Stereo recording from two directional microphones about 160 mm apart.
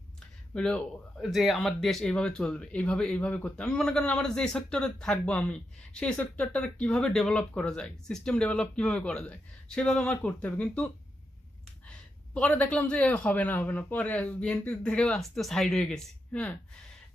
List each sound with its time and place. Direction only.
0.5 s speech: 5° left (ahead or behind)
12.3 s speech: 10° left (ahead or behind)